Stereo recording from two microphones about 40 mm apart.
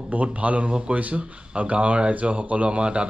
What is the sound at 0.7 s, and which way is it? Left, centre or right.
Speech, right.